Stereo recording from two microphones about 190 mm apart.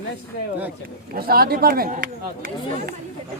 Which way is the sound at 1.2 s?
50° right (ahead or behind).